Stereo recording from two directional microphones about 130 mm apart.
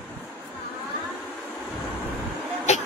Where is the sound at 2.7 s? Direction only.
65° left (ahead or behind).